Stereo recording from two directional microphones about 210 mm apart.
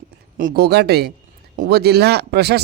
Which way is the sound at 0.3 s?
45° right (ahead or behind).